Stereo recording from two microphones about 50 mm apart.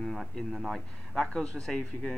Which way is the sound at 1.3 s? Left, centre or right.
Centre.